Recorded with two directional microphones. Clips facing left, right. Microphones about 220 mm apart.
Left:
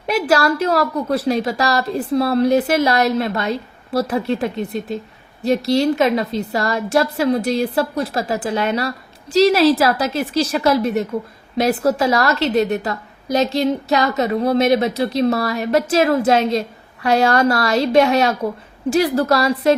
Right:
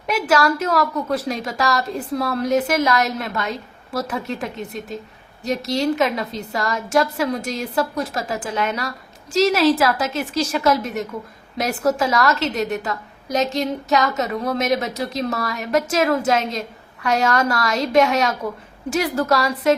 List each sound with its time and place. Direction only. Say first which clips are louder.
0.0 s a woman's voice: left 2 dB; 35° left (ahead or behind)